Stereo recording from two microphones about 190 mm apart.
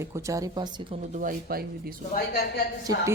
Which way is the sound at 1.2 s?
50° right (ahead or behind).